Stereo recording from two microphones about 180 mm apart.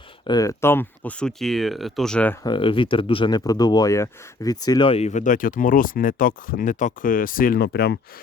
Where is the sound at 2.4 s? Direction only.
25° left (ahead or behind).